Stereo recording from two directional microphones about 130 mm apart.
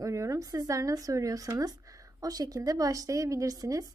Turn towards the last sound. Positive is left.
turn(degrees=-25)  # may be behind; listen again after turning